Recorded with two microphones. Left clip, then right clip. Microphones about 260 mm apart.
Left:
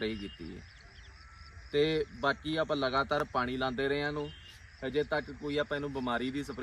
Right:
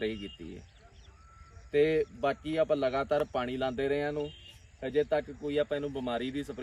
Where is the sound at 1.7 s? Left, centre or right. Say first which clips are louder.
Right 3 dB; centre.